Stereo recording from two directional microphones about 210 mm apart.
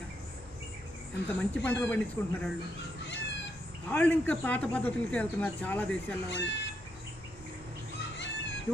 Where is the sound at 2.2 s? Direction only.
10° left (ahead or behind).